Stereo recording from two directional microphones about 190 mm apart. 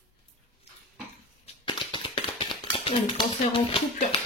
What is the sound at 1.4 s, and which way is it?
Tap, 25° left (ahead or behind).